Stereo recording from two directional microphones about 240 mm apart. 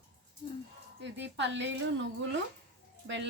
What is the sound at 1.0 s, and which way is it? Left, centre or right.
A woman's voice, right.